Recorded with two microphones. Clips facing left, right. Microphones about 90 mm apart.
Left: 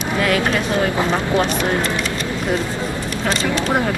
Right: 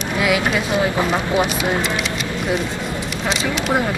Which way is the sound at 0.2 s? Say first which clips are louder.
Even; 10° right (ahead or behind).